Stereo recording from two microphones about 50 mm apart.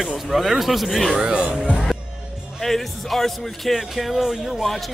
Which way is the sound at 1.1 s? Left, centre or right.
Centre.